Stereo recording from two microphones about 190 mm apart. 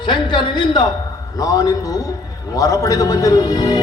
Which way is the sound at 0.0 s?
25° left (ahead or behind).